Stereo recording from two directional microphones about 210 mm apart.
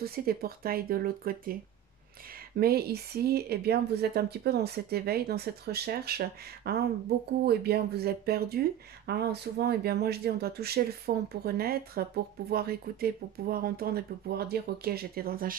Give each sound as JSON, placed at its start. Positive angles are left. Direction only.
{"t": 0.0, "sound": "speech", "side_deg": -45}
{"t": 2.6, "sound": "speech", "side_deg": -50}